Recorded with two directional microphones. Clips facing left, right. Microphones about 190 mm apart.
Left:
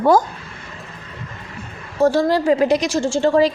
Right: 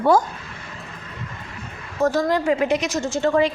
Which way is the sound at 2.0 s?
30° left (ahead or behind).